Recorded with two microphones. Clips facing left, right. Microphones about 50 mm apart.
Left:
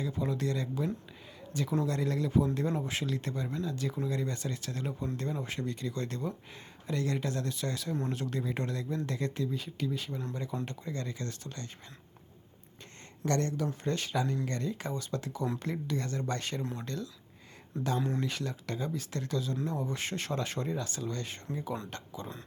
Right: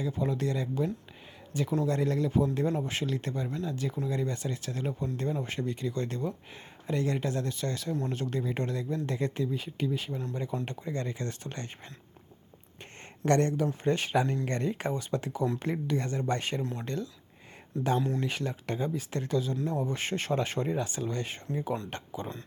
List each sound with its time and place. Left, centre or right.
0.0 s speech: centre
10.7 s speech: right
13.2 s speech: right
17.7 s speech: centre
18.2 s speech: centre